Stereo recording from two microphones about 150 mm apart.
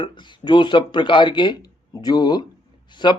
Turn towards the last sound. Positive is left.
turn(degrees=30)  # may be behind; listen again after turning